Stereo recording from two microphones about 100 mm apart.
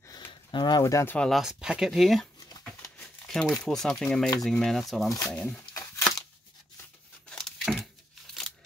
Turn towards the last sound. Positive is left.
turn(degrees=5)  # may be behind; listen again after turning